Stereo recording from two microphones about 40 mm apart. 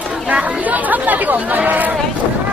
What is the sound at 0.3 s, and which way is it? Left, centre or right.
Speech, right.